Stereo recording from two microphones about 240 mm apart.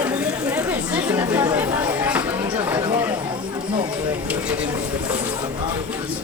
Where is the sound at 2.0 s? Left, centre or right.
Centre.